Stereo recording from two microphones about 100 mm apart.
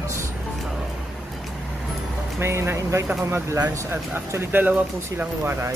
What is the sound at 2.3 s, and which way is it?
Speech, 25° right (ahead or behind).